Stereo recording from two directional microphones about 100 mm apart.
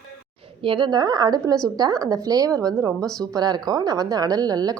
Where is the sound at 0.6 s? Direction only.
55° right (ahead or behind).